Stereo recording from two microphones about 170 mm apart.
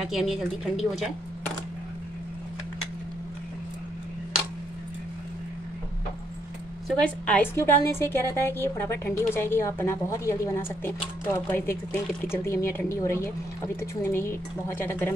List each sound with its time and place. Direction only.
0.0 s a woman's voice: centre (ahead or behind)
7.0 s a woman's voice: 5° left (ahead or behind)